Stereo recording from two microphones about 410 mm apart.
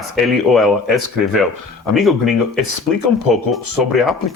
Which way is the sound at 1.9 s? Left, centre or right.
Centre.